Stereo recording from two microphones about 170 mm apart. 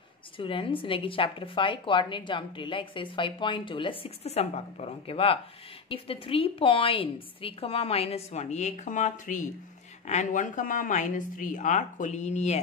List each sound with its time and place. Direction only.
0.4 s a woman's voice: 30° left (ahead or behind)